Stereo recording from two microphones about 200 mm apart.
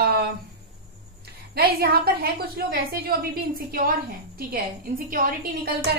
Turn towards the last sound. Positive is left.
turn(degrees=-50)  # may be behind; listen again after turning